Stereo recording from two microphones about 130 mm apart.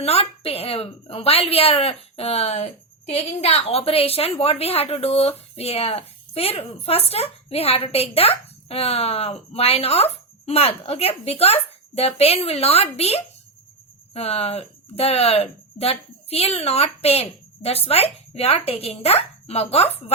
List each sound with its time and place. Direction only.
0.0 s a woman's voice: 50° left (ahead or behind)